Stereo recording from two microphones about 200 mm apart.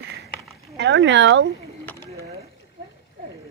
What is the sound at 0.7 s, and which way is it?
Speech, 60° right (ahead or behind).